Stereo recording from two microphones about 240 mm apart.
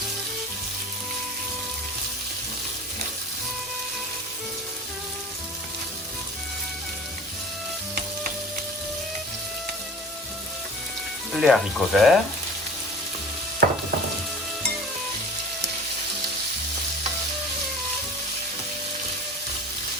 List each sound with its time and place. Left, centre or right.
11.3 s speech: centre
13.6 s frying: right